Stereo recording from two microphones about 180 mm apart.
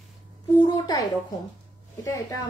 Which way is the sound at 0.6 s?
20° left (ahead or behind).